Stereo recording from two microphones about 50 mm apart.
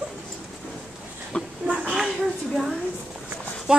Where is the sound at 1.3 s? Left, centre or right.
Centre.